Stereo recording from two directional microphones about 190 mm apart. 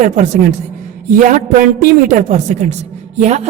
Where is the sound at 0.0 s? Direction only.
40° right (ahead or behind).